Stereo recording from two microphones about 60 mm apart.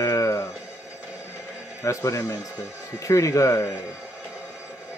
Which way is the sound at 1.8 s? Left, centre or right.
Left.